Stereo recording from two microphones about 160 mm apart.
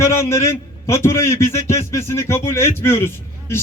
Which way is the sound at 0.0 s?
15° left (ahead or behind).